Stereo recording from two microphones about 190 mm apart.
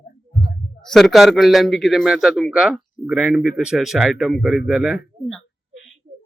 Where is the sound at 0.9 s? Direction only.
Centre (ahead or behind).